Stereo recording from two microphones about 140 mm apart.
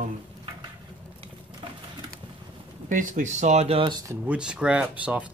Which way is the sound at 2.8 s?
65° right (ahead or behind).